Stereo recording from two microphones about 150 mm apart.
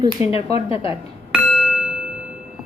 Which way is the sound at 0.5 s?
40° left (ahead or behind).